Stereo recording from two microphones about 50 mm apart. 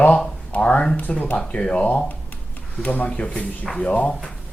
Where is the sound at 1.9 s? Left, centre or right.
Left.